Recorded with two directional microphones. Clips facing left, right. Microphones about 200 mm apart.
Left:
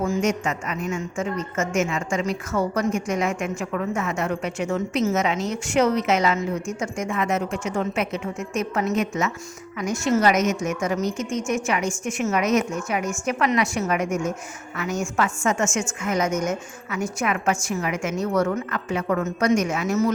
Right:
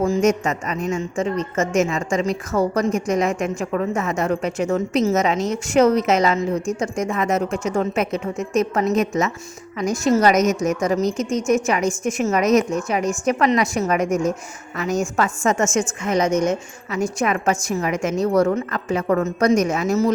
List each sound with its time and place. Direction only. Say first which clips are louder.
0.0 s a woman's voice: right 5 dB; 35° right (ahead or behind)